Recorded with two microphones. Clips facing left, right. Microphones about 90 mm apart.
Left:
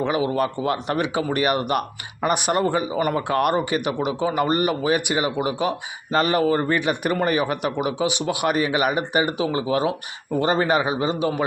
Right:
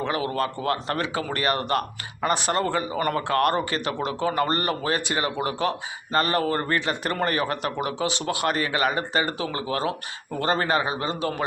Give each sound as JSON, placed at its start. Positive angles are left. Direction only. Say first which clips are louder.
{"t": 0.1, "sound": "speech", "louder": "left 4 dB", "side_deg": 15}